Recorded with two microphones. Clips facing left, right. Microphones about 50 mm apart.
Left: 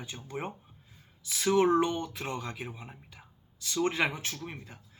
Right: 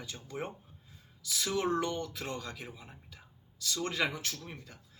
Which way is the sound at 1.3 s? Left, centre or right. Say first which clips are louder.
Left 7 dB; left.